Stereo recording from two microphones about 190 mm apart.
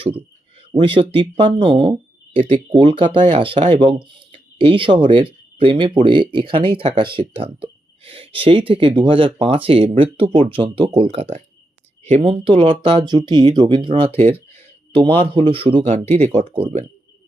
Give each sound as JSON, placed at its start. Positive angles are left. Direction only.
{"t": 0.7, "sound": "speech", "side_deg": -25}